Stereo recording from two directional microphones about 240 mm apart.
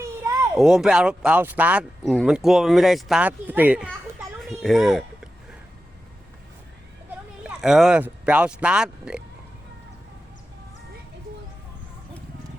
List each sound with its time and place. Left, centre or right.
0.5 s speech: centre
7.4 s speech: centre